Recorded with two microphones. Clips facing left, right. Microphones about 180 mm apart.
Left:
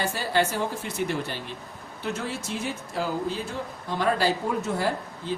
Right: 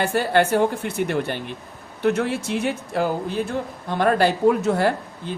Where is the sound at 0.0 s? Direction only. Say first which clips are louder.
Right 6 dB; 60° right (ahead or behind).